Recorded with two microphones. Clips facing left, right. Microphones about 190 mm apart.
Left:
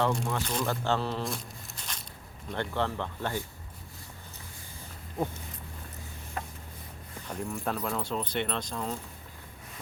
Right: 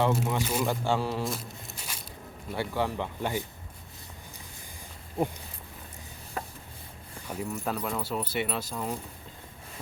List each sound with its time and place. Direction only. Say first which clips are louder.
0.3 s speech: right 3 dB; 10° right (ahead or behind)
1.2 s a sound: right 2 dB; centre (ahead or behind)
2.5 s speech: right 1 dB; 10° right (ahead or behind)
5.2 s speech: right 3 dB; 30° right (ahead or behind)
7.3 s speech: right 1 dB; 5° right (ahead or behind)